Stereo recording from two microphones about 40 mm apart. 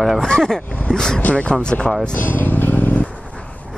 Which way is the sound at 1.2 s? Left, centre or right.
Left.